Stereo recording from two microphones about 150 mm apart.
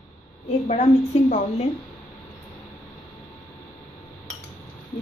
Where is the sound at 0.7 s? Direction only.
50° left (ahead or behind).